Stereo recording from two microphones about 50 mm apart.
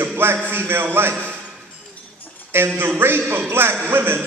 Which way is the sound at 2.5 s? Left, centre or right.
Right.